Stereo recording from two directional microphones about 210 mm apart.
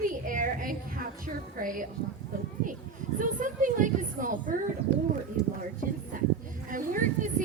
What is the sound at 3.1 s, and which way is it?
Speech, 40° right (ahead or behind).